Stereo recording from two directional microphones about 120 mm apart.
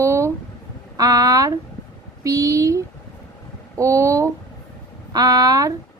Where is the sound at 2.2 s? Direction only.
30° right (ahead or behind).